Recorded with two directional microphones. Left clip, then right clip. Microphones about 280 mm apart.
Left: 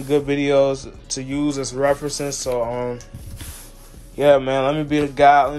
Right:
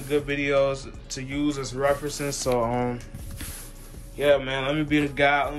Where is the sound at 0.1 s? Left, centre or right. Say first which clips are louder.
Left 6 dB; centre.